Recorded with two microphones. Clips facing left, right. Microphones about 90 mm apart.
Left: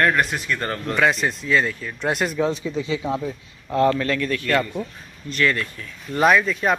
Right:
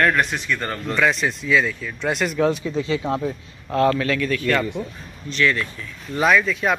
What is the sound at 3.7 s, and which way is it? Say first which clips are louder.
Speech: even; 20° left (ahead or behind).